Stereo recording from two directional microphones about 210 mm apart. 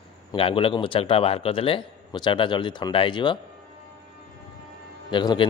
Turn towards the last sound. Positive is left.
turn(degrees=20)  # may be behind; listen again after turning